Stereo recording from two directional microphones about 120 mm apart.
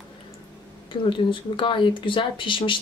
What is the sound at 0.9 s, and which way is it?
Speech, 45° left (ahead or behind).